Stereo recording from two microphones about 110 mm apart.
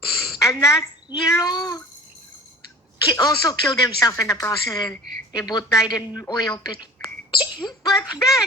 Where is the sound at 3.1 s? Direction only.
35° left (ahead or behind).